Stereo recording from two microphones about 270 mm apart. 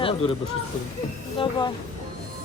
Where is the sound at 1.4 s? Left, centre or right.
Centre.